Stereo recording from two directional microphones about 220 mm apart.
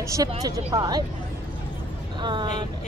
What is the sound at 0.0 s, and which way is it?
Speech, 15° right (ahead or behind).